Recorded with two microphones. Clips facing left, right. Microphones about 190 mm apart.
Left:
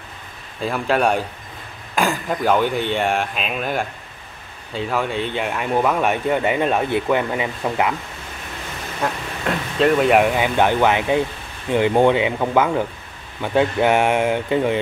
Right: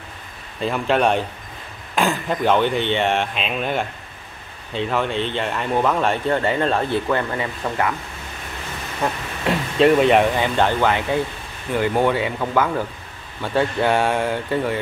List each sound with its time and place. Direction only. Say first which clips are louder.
0.6 s speech: even; 5° left (ahead or behind)
9.8 s speech: right 1 dB; centre (ahead or behind); by 14.8 s 20° left (ahead or behind)